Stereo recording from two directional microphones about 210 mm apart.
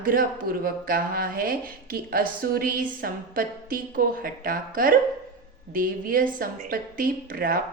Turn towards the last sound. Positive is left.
turn(degrees=-45)  # may be behind; listen again after turning